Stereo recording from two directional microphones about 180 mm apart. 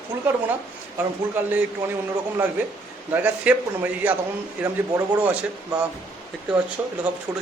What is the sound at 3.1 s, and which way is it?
A man's voice, 10° right (ahead or behind).